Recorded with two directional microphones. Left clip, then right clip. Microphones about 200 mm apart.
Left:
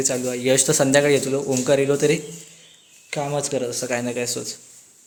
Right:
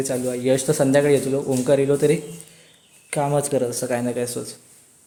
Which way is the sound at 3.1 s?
20° right (ahead or behind).